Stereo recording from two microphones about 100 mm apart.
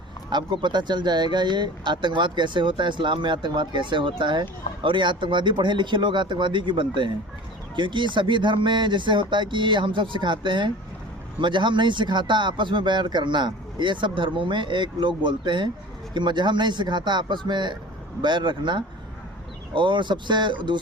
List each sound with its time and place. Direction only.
0.3 s speech: 50° right (ahead or behind)